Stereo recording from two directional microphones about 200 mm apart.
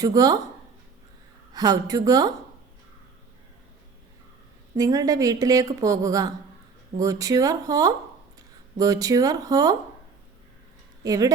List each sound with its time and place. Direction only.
0.0 s a woman's voice: 20° right (ahead or behind)
1.5 s a woman's voice: 20° right (ahead or behind)
4.8 s a woman's voice: 15° right (ahead or behind)
11.0 s speech: 20° right (ahead or behind)